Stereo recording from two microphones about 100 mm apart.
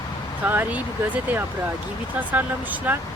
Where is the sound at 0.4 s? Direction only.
20° right (ahead or behind).